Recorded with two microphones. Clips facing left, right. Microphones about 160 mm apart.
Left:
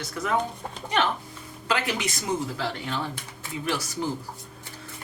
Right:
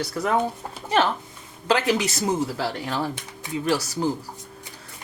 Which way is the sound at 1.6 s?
35° right (ahead or behind).